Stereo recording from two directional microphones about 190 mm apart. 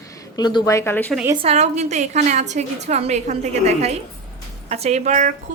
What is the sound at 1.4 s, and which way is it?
A woman's voice, 35° right (ahead or behind).